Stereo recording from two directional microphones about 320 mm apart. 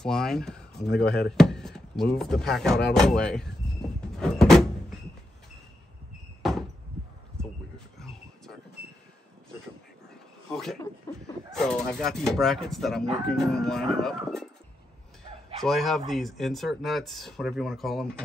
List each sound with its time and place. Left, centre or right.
0.0 s speech: centre
4.2 s door: centre
8.0 s a sound: centre
8.8 s train: right
10.5 s a sound: centre
11.5 s speech: centre
15.6 s speech: centre